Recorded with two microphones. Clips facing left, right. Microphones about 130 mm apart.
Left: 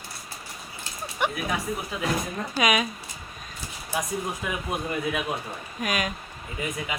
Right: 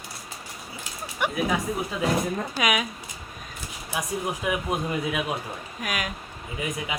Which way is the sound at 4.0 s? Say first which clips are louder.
Right 1 dB; 15° right (ahead or behind).